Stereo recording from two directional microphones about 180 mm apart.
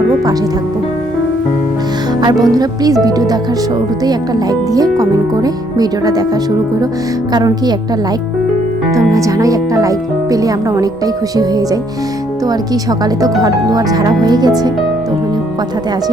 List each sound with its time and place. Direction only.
2.2 s speech: 20° right (ahead or behind)
4.7 s speech: 20° right (ahead or behind)
8.9 s speech: 20° right (ahead or behind)
13.4 s speech: 20° right (ahead or behind)